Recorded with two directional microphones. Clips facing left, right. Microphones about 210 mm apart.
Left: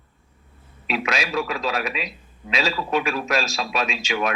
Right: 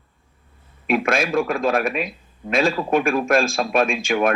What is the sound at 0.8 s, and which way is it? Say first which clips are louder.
A man's voice: right 6 dB; 50° right (ahead or behind).